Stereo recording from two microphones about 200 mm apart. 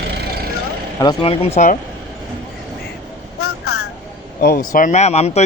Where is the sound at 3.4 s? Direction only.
90° left.